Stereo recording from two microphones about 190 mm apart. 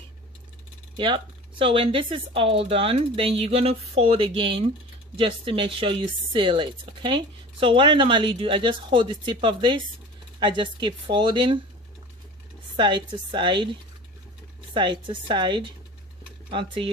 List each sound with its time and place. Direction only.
0.9 s speech: 25° right (ahead or behind)
12.7 s speech: 25° right (ahead or behind)